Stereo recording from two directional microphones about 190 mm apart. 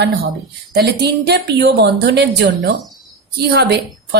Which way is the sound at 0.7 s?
60° right (ahead or behind).